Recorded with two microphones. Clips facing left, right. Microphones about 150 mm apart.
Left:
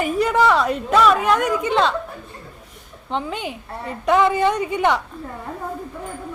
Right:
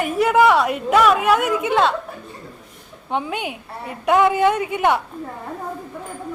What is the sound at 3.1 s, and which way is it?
A woman's voice, 10° right (ahead or behind).